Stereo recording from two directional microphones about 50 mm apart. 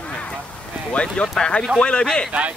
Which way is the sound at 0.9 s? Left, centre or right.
Left.